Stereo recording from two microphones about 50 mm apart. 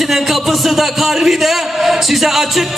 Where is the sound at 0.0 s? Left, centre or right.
Centre.